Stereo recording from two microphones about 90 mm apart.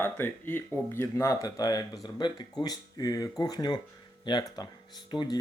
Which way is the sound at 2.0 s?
55° left (ahead or behind).